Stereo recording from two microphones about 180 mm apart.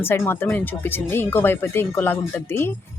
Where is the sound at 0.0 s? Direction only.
10° left (ahead or behind).